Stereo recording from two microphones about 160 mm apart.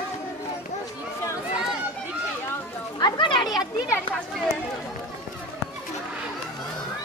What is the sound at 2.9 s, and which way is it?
Children playing, 25° left (ahead or behind).